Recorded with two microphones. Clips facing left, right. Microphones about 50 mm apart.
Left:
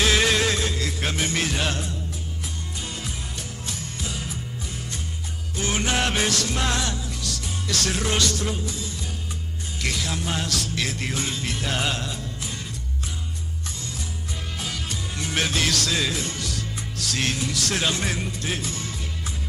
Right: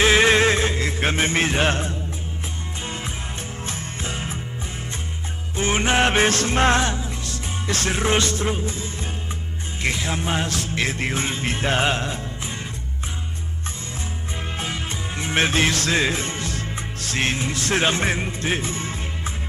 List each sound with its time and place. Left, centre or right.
0.0 s music: right
3.6 s music: right
5.6 s music: right
14.6 s music: right